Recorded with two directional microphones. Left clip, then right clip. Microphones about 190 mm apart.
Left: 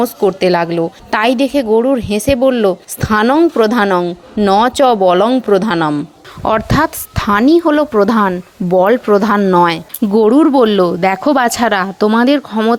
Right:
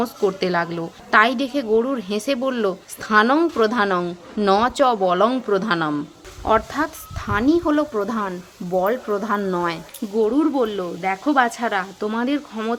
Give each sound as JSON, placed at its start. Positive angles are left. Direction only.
{"t": 0.0, "sound": "a woman's voice", "side_deg": 30}
{"t": 6.4, "sound": "speech", "side_deg": 45}